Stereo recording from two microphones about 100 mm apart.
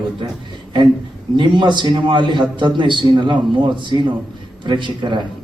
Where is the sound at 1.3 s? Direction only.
50° right (ahead or behind).